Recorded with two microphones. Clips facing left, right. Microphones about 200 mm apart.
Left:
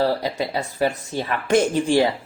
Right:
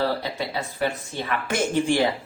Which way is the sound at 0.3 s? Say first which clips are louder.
Left 4 dB; 40° left (ahead or behind).